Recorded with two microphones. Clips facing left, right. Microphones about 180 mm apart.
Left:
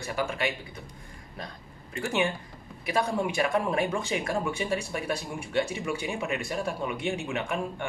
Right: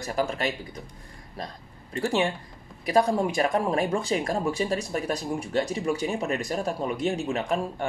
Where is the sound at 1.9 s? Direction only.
35° right (ahead or behind).